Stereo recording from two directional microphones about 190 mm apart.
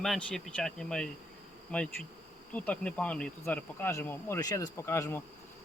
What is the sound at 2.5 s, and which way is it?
Insect, 5° left (ahead or behind).